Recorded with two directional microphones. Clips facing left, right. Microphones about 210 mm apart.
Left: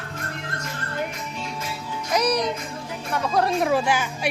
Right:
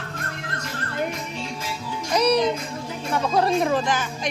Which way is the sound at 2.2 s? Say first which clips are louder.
Right 5 dB; 25° right (ahead or behind).